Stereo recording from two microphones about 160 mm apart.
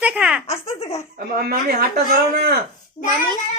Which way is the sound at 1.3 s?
70° right (ahead or behind).